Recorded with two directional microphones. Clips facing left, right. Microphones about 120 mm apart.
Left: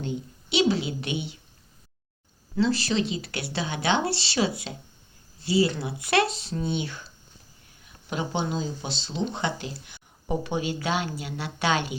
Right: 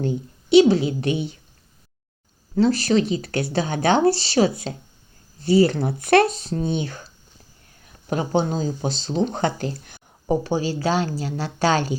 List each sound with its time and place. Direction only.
0.0 s a woman's voice: 40° right (ahead or behind)
2.6 s speech: 45° right (ahead or behind)